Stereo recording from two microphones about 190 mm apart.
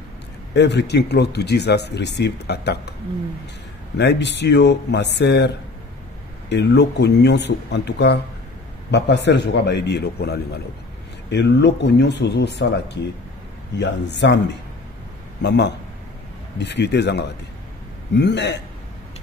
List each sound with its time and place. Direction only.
0.6 s speech: 65° left (ahead or behind)
4.0 s speech: 65° left (ahead or behind)
6.5 s speech: 65° left (ahead or behind)
15.4 s speech: 65° left (ahead or behind)